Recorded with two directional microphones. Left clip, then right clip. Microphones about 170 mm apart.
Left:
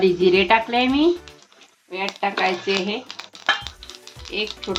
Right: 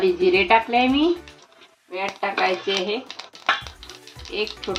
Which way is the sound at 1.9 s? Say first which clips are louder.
Left 1 dB; 30° left (ahead or behind).